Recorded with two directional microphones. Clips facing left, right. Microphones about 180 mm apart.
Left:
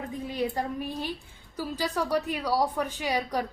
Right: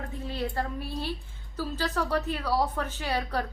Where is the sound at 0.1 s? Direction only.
15° left (ahead or behind).